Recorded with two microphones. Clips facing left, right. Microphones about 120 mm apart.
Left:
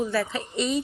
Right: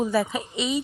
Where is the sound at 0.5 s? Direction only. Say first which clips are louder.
Left 2 dB; centre (ahead or behind).